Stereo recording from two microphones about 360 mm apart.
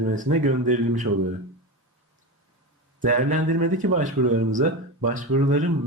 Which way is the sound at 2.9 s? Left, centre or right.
Right.